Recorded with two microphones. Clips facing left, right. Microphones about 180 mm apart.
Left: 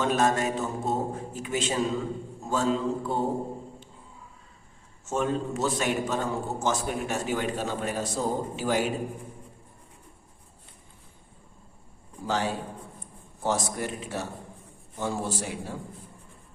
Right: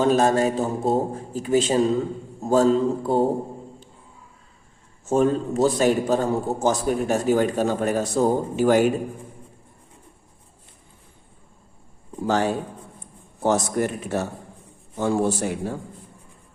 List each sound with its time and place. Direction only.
0.0 s a man's voice: 35° right (ahead or behind)
5.0 s a man's voice: 35° right (ahead or behind); by 8.9 s 55° right (ahead or behind)
12.2 s a man's voice: 50° right (ahead or behind)